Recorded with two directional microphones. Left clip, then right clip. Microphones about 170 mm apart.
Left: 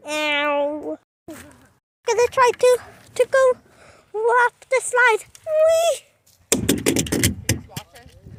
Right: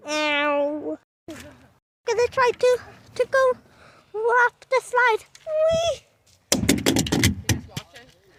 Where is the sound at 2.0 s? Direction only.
20° left (ahead or behind).